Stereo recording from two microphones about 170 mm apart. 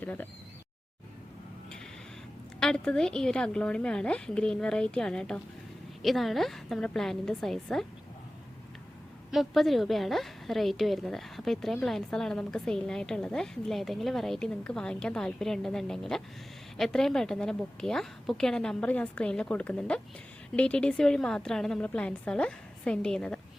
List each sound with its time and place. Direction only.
0.0 s speech: 10° left (ahead or behind)
2.6 s a woman's voice: 5° left (ahead or behind)
9.3 s a woman's voice: centre (ahead or behind)